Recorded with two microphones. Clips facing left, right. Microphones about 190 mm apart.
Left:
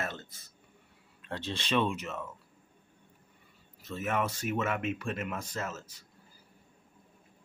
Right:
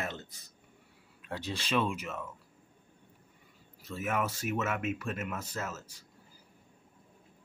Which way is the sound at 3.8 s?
10° right (ahead or behind).